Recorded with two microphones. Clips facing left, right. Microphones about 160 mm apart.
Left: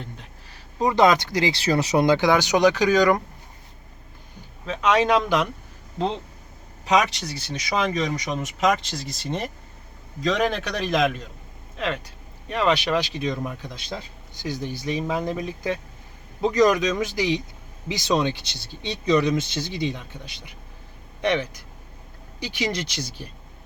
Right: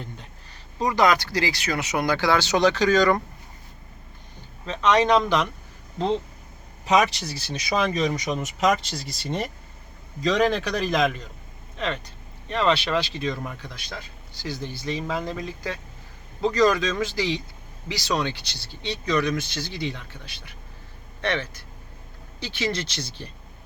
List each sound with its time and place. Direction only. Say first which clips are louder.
0.8 s speech: left 3 dB; 25° left (ahead or behind)
2.0 s speech: even; 20° left (ahead or behind)
4.6 s speech: even; 10° left (ahead or behind)
6.8 s speech: even; 5° right (ahead or behind)